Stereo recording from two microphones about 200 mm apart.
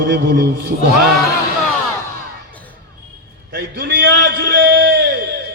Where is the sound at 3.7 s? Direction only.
50° right (ahead or behind).